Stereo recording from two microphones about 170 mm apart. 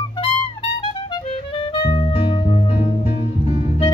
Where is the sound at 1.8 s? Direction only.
25° left (ahead or behind).